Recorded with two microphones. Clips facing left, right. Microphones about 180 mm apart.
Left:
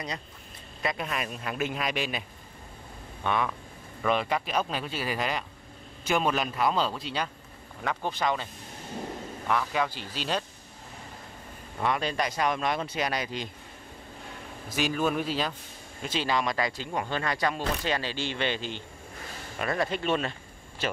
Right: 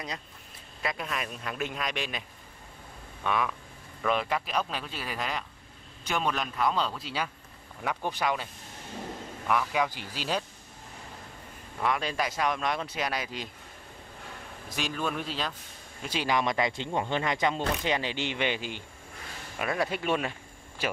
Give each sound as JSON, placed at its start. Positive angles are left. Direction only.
{"t": 0.8, "sound": "speech", "side_deg": 0}
{"t": 3.3, "sound": "speech", "side_deg": 0}
{"t": 9.5, "sound": "speech", "side_deg": -10}
{"t": 11.8, "sound": "speech", "side_deg": 0}
{"t": 14.7, "sound": "speech", "side_deg": 5}
{"t": 16.0, "sound": "speech", "side_deg": -10}